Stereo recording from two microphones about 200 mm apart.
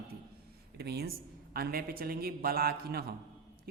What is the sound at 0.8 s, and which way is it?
Speech, 55° right (ahead or behind).